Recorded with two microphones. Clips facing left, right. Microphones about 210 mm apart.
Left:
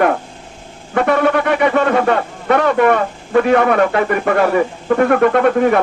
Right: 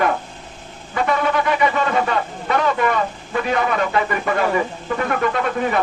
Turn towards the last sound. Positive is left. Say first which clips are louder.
# left 8 dB
turn(degrees=55)  # may be behind; listen again after turning